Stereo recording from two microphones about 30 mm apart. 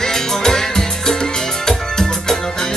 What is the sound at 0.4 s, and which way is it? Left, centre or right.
Music, centre.